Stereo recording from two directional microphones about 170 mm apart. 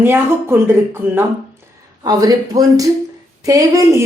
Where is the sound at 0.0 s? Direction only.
15° right (ahead or behind).